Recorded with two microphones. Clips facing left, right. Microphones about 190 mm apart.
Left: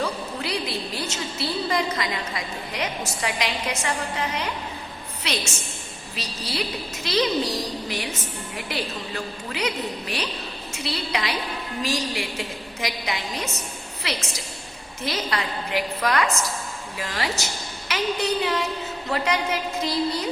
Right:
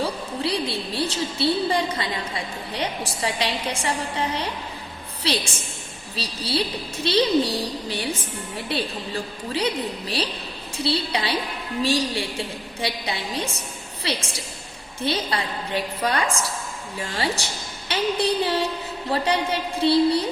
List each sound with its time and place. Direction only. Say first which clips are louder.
0.0 s a woman's voice: right 2 dB; 30° right (ahead or behind)